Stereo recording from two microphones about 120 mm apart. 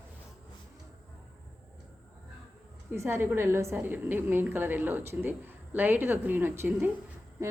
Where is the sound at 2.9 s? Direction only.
20° right (ahead or behind).